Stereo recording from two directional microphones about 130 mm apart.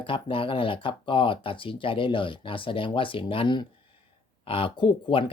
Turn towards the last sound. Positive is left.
turn(degrees=40)  # may be behind; listen again after turning